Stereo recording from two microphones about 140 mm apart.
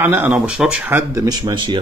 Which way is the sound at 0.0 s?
15° right (ahead or behind).